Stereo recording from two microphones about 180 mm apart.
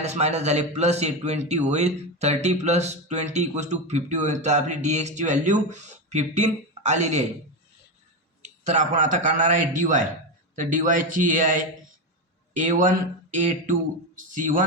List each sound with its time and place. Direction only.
0.0 s speech: 35° right (ahead or behind)
8.4 s speech: 40° right (ahead or behind)
12.5 s speech: 45° right (ahead or behind)